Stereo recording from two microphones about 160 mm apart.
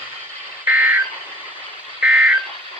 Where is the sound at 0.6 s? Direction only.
10° right (ahead or behind).